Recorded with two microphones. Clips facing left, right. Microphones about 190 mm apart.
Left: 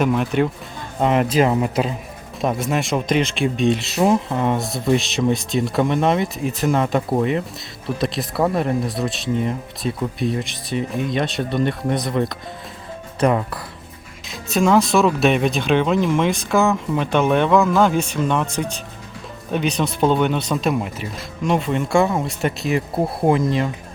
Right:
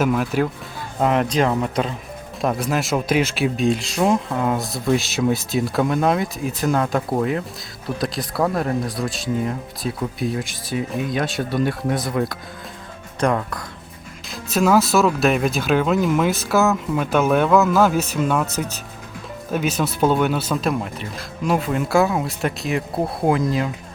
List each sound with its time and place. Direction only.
0.0 s speech: centre (ahead or behind)